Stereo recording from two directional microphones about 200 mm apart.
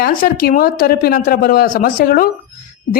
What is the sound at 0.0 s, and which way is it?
A woman's voice, 45° left (ahead or behind).